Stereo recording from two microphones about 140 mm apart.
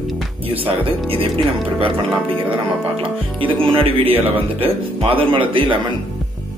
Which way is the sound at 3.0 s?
40° right (ahead or behind).